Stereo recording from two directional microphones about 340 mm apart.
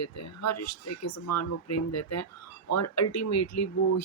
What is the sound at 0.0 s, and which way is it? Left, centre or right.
Speech, left.